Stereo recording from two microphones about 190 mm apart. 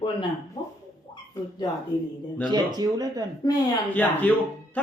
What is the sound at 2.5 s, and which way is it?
Speech, 20° right (ahead or behind).